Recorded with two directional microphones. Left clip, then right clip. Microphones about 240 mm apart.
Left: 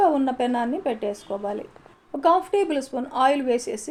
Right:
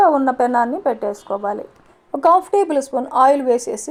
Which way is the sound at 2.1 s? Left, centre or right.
Right.